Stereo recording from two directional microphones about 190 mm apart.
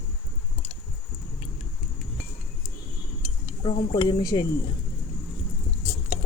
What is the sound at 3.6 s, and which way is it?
Speech, 25° left (ahead or behind).